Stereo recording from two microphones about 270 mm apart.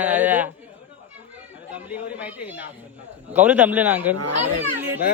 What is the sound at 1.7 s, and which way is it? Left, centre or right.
Speech, centre.